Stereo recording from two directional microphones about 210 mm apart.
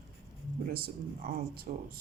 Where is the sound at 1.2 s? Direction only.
45° right (ahead or behind).